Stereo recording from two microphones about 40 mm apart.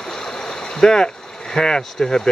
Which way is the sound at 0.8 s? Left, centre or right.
Centre.